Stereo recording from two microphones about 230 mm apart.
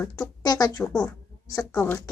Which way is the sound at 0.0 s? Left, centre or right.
Centre.